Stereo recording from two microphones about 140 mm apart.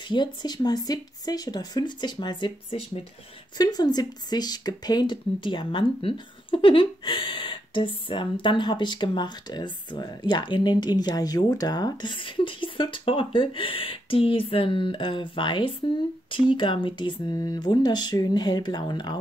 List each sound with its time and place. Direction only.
0.1 s speech: 30° left (ahead or behind)